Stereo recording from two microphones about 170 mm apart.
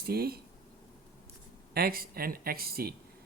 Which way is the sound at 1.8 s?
60° right (ahead or behind).